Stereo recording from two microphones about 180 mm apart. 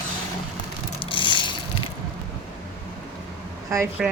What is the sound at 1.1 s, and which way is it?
Vehicle, 25° left (ahead or behind).